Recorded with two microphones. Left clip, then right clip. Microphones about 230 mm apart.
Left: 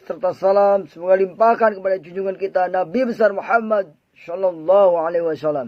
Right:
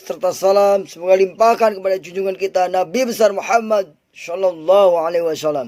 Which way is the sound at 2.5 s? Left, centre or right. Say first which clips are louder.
Right 2 dB; right.